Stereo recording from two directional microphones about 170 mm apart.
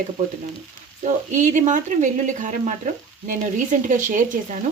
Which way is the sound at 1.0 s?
45° right (ahead or behind).